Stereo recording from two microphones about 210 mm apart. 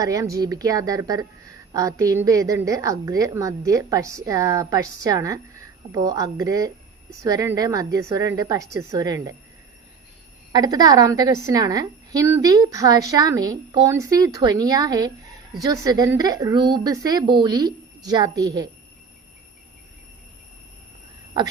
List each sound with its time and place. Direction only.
0.0 s a woman's voice: 15° right (ahead or behind)
10.5 s a woman's voice: 20° right (ahead or behind)